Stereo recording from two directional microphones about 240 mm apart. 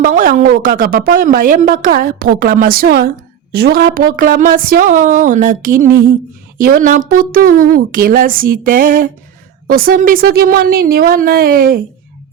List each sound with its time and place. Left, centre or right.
0.0 s a woman's voice: right